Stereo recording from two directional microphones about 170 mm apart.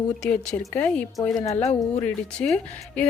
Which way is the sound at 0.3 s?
5° left (ahead or behind).